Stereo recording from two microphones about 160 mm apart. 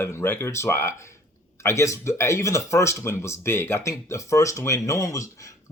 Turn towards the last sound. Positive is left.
turn(degrees=20)  # may be behind; listen again after turning